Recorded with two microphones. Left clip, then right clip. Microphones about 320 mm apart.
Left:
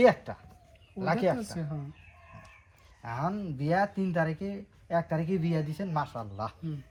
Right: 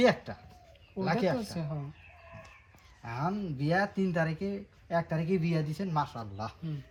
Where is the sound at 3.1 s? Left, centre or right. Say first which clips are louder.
Left 1 dB; centre.